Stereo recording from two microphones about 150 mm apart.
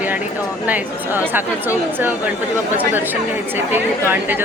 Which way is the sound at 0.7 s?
10° right (ahead or behind).